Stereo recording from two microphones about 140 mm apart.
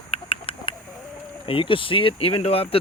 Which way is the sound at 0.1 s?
40° left (ahead or behind).